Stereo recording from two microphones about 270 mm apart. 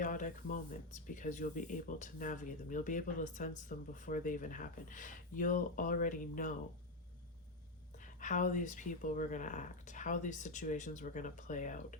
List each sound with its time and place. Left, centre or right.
0.0 s speech: left
7.9 s speech: left